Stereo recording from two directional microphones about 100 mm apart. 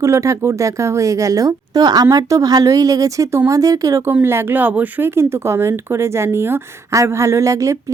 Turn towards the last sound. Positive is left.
turn(degrees=-35)  # may be behind; listen again after turning